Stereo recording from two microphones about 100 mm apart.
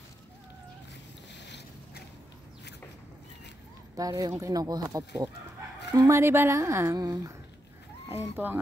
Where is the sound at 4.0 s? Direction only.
35° right (ahead or behind).